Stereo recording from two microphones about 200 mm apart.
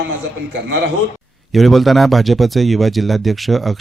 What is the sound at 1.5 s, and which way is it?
Speech, centre (ahead or behind).